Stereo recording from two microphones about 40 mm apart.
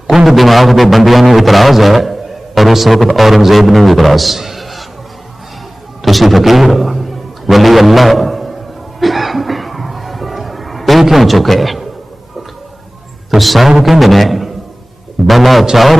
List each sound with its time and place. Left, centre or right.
0.3 s a man's voice: centre
6.0 s a man's voice: centre
9.0 s cough: centre
13.3 s a man's voice: centre